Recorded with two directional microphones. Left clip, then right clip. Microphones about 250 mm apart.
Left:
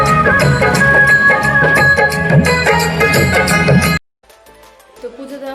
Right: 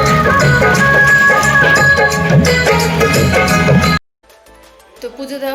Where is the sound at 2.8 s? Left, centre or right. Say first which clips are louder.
Even; centre.